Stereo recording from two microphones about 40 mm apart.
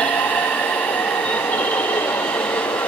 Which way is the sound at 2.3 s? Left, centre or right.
Left.